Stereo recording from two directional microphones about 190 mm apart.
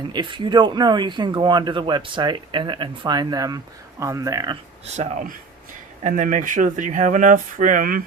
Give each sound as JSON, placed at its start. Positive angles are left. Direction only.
{"t": 0.1, "sound": "speech", "side_deg": -25}
{"t": 6.0, "sound": "speech", "side_deg": -40}